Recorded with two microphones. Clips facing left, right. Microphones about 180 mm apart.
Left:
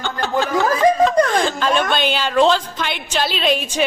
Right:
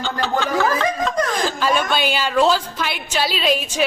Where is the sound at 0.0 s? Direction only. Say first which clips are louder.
Left 1 dB; 45° left (ahead or behind).